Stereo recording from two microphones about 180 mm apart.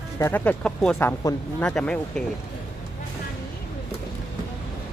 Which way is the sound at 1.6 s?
5° left (ahead or behind).